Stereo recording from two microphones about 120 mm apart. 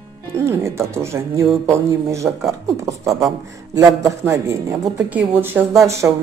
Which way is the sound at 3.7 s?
30° right (ahead or behind).